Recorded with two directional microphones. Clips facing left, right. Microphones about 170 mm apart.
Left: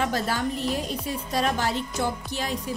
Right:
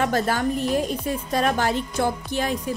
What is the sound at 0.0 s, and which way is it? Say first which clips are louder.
Speech: right 4 dB; 50° right (ahead or behind).